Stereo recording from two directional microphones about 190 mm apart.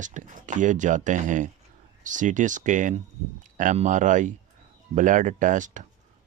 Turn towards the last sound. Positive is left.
turn(degrees=-40)  # may be behind; listen again after turning